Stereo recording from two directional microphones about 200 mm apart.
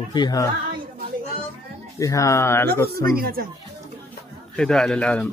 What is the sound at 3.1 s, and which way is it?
Speech, 50° right (ahead or behind).